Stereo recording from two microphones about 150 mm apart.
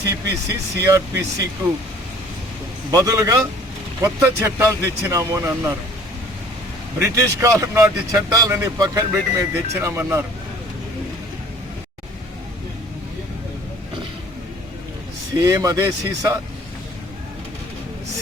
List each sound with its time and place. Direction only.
0.4 s speech: 20° right (ahead or behind)
2.9 s speech: 20° right (ahead or behind)
7.0 s speech: 20° right (ahead or behind)
15.4 s speech: 25° right (ahead or behind)